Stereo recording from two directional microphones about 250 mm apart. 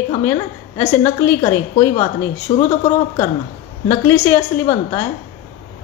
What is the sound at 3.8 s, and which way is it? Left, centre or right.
A woman's voice, centre.